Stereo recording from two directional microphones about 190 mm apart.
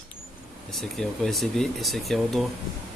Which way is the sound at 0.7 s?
Centre (ahead or behind).